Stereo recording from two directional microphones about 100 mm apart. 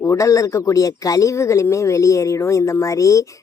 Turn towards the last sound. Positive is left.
turn(degrees=35)  # may be behind; listen again after turning